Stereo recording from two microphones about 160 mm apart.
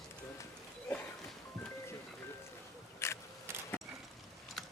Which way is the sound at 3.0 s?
15° left (ahead or behind).